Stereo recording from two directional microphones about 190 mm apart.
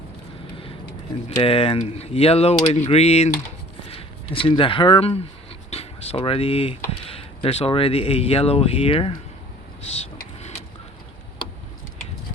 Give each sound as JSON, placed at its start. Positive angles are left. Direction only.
{"t": 1.4, "sound": "speech", "side_deg": 30}